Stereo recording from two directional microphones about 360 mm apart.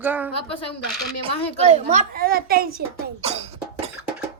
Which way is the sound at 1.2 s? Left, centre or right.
Centre.